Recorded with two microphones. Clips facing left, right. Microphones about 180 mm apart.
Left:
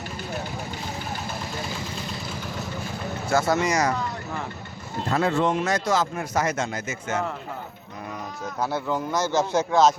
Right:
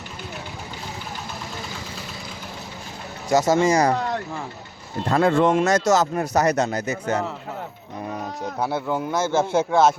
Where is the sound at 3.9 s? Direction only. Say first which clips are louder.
Right 5 dB; 70° right (ahead or behind).